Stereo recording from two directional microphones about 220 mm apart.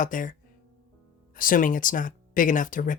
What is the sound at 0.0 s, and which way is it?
Speech, 35° left (ahead or behind).